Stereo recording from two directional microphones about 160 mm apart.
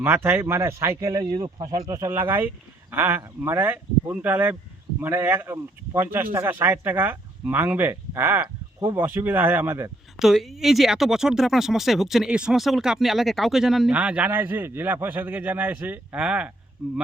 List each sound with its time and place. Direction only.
0.0 s speech: 15° right (ahead or behind)
10.2 s speech: centre (ahead or behind)